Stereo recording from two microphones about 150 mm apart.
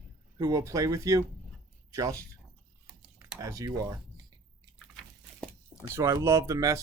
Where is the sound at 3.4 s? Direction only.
20° right (ahead or behind).